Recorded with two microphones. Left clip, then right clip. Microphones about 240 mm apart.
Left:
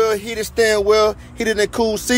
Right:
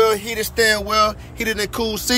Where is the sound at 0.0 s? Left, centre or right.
Centre.